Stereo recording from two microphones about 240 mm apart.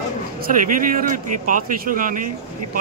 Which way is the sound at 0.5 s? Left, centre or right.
Right.